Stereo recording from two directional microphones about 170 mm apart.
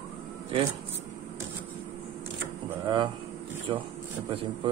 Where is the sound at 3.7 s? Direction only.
30° right (ahead or behind).